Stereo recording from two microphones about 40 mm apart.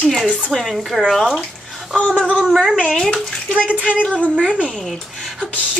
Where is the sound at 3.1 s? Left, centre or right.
Centre.